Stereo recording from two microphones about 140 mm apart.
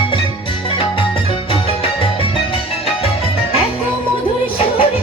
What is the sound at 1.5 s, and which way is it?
Music, 40° left (ahead or behind).